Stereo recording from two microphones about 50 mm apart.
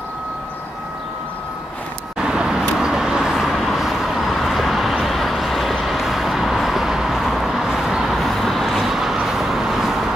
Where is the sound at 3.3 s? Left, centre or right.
Centre.